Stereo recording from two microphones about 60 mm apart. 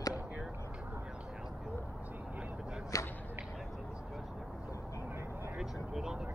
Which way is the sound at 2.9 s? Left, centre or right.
Left.